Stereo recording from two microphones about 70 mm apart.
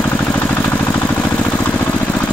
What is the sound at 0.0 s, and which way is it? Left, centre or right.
Vehicle, centre.